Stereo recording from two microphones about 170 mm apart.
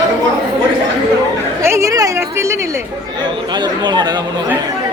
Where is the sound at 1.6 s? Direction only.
15° right (ahead or behind).